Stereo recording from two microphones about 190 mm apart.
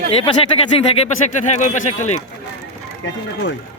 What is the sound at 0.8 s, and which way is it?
Speech, 35° left (ahead or behind).